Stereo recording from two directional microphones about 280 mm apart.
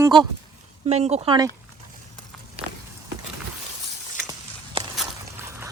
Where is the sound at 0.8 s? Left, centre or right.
Right.